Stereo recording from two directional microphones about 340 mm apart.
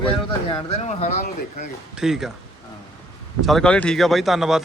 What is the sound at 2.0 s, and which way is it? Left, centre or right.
Speech, centre.